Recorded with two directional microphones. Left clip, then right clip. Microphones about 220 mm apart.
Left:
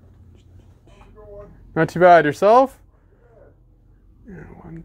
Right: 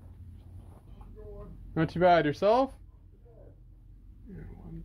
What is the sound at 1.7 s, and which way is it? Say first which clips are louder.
Speech: left 11 dB; 45° left (ahead or behind).